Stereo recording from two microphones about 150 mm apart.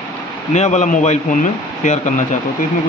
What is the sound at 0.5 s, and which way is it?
Speech, 50° left (ahead or behind).